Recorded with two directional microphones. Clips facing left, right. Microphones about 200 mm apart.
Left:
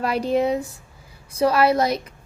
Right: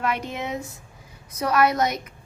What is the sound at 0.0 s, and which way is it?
A child's voice, 35° left (ahead or behind).